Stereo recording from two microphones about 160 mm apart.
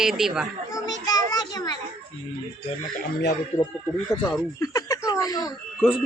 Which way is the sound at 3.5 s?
15° left (ahead or behind).